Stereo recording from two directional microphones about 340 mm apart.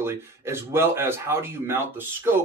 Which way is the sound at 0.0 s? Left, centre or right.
Centre.